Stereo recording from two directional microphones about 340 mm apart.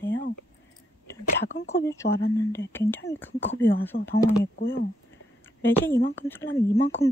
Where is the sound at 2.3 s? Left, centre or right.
Centre.